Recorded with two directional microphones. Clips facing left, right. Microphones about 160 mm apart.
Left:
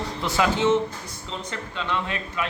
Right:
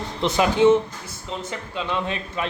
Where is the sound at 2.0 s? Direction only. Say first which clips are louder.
Right 2 dB; 30° right (ahead or behind).